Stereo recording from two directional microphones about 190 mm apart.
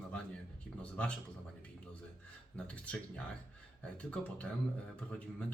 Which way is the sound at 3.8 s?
5° left (ahead or behind).